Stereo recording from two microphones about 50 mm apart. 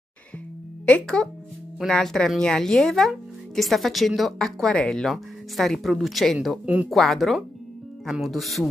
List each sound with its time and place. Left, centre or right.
1.0 s speech: centre
5.1 s speech: centre
6.6 s speech: right
6.9 s speech: centre